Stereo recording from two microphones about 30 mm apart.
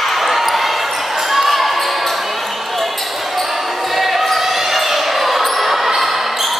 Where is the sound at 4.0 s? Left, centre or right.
Centre.